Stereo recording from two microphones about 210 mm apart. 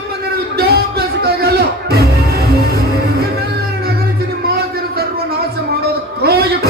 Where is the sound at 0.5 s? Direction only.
50° right (ahead or behind).